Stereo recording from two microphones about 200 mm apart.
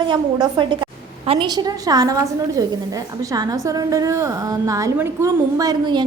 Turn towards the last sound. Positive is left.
turn(degrees=-20)  # may be behind; listen again after turning